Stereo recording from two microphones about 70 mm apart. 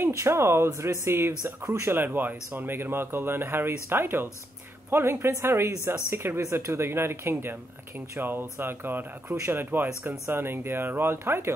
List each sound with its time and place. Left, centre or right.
0.0 s speech: right
1.4 s speech: right
1.9 s speech: right